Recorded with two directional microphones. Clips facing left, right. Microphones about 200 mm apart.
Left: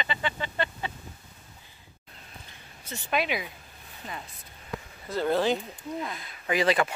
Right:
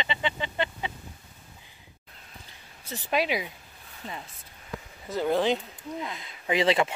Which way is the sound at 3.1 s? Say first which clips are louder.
Right 2 dB; 30° right (ahead or behind).